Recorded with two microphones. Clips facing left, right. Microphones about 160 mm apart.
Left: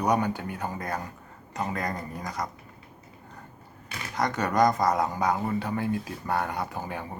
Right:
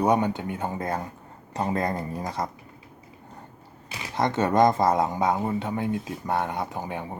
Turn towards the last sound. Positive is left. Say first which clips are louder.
# right 2 dB
turn(degrees=-20)  # may be behind; listen again after turning